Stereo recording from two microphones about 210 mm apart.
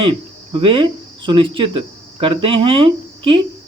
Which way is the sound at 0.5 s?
25° right (ahead or behind).